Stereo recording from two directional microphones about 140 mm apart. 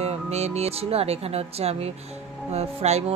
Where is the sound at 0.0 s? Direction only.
50° right (ahead or behind).